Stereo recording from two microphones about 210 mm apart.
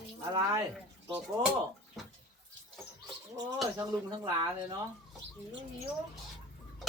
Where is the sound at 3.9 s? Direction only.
15° right (ahead or behind).